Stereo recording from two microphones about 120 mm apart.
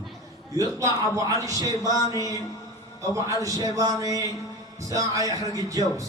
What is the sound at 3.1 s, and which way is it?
A man's voice, 30° right (ahead or behind).